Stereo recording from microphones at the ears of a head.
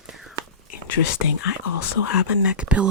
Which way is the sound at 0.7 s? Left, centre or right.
Left.